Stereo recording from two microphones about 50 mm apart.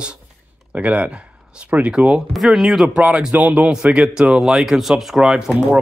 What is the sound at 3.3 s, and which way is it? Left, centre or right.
Speech, right.